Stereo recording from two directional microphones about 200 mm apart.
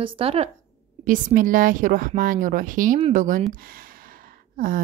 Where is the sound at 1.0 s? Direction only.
40° right (ahead or behind).